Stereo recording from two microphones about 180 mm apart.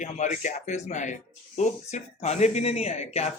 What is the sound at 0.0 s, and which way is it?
Speech, 40° left (ahead or behind).